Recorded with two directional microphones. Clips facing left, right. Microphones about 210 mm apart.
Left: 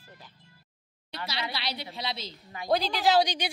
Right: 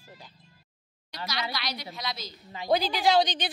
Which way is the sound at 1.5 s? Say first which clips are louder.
Even; 30° left (ahead or behind).